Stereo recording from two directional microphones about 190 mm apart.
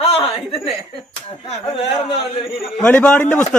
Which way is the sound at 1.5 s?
30° left (ahead or behind).